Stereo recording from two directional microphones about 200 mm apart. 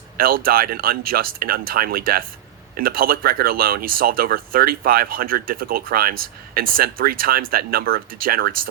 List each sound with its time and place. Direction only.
0.2 s speech: 45° right (ahead or behind)